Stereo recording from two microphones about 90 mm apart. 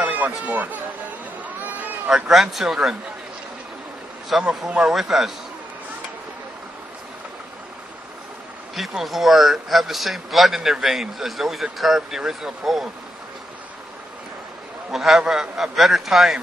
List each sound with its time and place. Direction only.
0.0 s speech: 20° right (ahead or behind)
2.0 s a man's voice: 5° right (ahead or behind)
4.3 s a man's voice: 5° right (ahead or behind)
8.7 s a man's voice: centre (ahead or behind)
14.9 s a man's voice: 5° right (ahead or behind)